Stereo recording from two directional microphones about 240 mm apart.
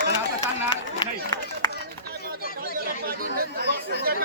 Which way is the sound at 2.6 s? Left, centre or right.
Right.